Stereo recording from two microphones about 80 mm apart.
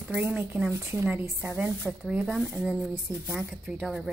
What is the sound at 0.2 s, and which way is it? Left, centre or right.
A woman's voice, right.